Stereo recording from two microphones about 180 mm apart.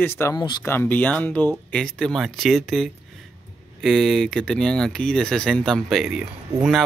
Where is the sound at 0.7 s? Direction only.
10° left (ahead or behind).